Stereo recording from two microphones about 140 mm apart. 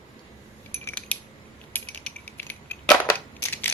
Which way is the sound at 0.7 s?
15° left (ahead or behind).